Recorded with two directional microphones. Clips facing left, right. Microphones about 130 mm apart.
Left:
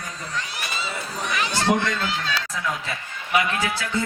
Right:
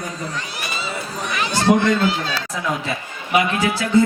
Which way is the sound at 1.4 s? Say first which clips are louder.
Right 6 dB; 40° right (ahead or behind).